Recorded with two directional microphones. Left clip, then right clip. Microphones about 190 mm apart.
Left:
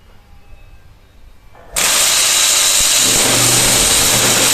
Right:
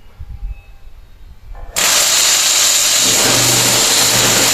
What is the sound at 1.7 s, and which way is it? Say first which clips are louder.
Vehicle: right 1 dB; centre (ahead or behind).